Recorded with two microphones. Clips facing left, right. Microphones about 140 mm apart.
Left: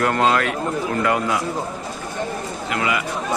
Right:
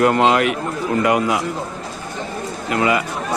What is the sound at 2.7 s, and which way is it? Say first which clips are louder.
Speech: right 5 dB; 35° right (ahead or behind).